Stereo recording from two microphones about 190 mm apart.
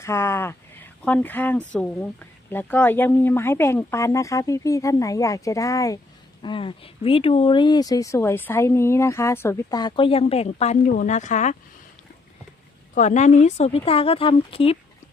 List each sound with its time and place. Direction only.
0.0 s speech: 15° left (ahead or behind); by 11.5 s 40° left (ahead or behind)
12.9 s a woman's voice: 40° left (ahead or behind)